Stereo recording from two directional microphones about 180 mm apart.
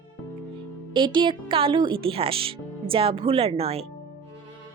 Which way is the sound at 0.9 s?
25° right (ahead or behind).